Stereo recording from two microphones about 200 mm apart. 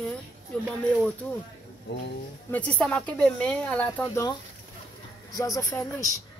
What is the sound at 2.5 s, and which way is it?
Speech, 5° left (ahead or behind).